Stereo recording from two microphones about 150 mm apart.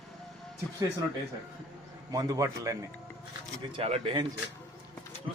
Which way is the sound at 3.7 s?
40° right (ahead or behind).